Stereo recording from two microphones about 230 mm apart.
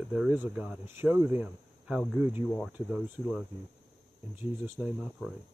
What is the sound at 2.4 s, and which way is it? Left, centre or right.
Speech, centre.